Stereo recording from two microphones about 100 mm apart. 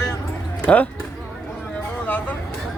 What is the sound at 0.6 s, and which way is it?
Speech, 15° left (ahead or behind).